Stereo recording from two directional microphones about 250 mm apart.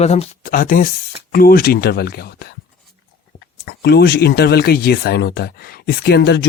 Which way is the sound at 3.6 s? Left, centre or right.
Left.